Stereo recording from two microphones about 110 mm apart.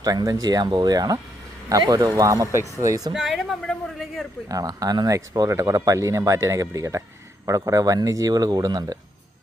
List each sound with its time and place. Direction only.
0.0 s speech: 35° right (ahead or behind)
3.1 s speech: centre (ahead or behind)
4.4 s speech: 35° right (ahead or behind)